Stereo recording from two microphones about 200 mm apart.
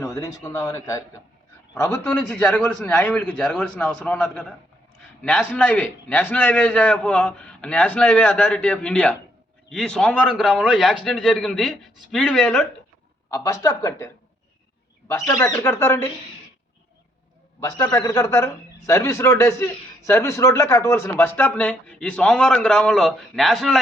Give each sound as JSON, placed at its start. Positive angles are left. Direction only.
{"t": 0.0, "sound": "a man's voice", "side_deg": 15}
{"t": 13.3, "sound": "a man's voice", "side_deg": 15}
{"t": 17.6, "sound": "a man's voice", "side_deg": 20}